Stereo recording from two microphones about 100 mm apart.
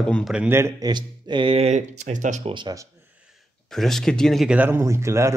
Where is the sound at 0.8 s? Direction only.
50° right (ahead or behind).